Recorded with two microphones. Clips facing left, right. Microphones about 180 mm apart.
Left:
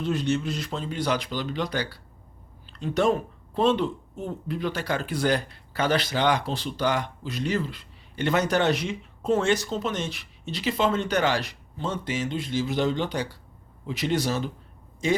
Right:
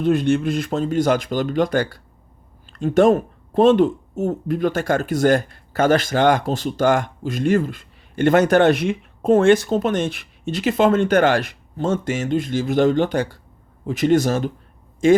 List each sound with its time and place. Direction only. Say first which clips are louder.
0.0 s speech: right 8 dB; 55° right (ahead or behind)